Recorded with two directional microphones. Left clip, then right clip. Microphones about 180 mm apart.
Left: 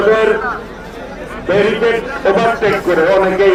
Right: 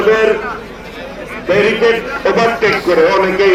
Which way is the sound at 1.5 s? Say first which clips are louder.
Right 1 dB; 45° left (ahead or behind).